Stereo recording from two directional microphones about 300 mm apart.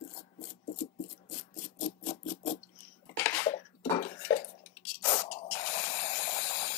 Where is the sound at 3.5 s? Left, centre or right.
Centre.